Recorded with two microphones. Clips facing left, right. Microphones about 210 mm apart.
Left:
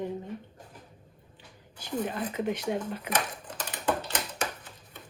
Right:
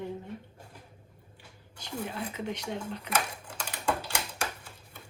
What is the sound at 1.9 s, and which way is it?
Speech, 10° right (ahead or behind).